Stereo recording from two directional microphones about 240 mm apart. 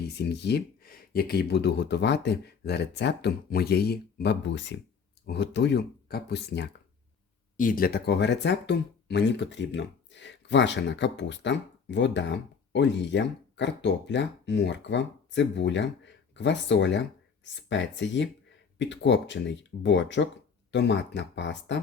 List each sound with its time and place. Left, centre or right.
0.2 s speech: left